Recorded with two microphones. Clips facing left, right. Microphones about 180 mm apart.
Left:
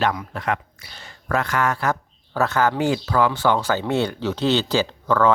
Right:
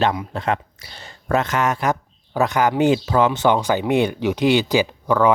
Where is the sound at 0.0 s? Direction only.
25° right (ahead or behind).